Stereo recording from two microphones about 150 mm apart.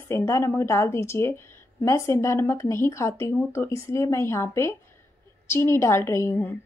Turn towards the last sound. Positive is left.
turn(degrees=15)  # may be behind; listen again after turning